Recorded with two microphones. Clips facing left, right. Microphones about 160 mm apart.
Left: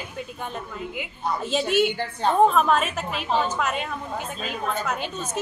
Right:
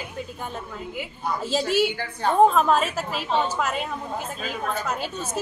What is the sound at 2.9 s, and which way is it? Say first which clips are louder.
A woman's voice: even; 5° right (ahead or behind).